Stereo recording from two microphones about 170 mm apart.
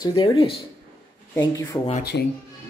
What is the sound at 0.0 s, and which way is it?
Speech, 25° left (ahead or behind).